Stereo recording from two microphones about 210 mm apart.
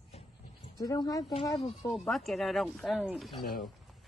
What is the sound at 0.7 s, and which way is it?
Speech, 15° left (ahead or behind).